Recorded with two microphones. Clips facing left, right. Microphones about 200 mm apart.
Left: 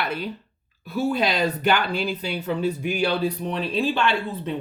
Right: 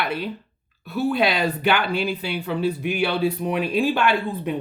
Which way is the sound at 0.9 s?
45° left (ahead or behind).